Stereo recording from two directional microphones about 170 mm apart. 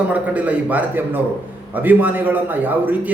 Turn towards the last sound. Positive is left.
turn(degrees=-10)  # may be behind; listen again after turning